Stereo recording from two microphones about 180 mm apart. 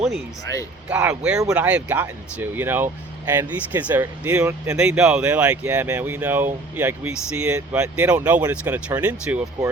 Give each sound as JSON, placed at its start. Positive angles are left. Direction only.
{"t": 0.4, "sound": "speech", "side_deg": 20}
{"t": 0.9, "sound": "speech", "side_deg": -5}